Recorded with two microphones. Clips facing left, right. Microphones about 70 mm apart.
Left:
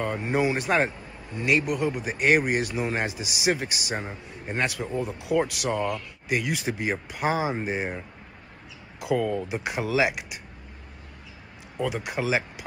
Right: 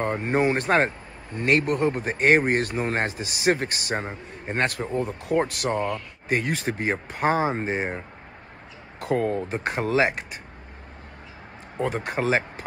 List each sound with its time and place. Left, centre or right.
0.0 s speech: right
3.9 s a man's voice: right
4.6 s speech: right
9.0 s speech: right
11.7 s speech: right